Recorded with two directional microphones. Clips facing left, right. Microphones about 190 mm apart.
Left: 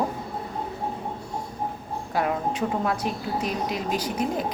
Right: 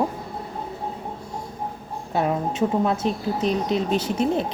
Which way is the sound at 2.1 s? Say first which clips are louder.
Right 2 dB; 25° right (ahead or behind).